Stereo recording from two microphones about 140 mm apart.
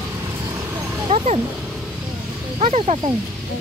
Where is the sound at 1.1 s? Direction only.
55° right (ahead or behind).